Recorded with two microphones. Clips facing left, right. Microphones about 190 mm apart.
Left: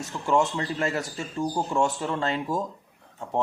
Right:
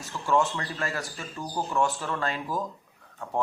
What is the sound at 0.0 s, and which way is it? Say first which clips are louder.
Speech: left 2 dB; 25° left (ahead or behind).